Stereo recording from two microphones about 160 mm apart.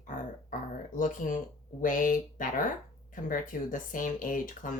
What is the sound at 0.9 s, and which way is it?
Speech, 55° left (ahead or behind).